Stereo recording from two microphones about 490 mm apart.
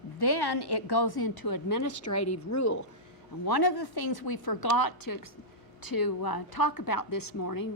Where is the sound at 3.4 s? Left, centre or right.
Left.